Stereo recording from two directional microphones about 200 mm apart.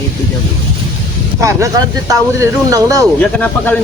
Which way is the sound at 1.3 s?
15° right (ahead or behind).